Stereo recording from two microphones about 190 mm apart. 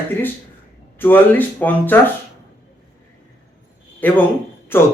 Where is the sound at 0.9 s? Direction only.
10° left (ahead or behind).